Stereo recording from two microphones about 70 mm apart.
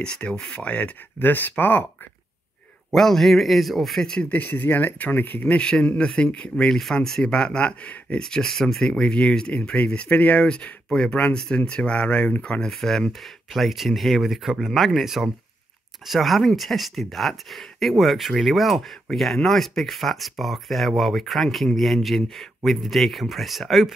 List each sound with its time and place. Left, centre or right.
0.0 s speech: centre
2.9 s speech: centre
4.3 s speech: left
6.5 s speech: centre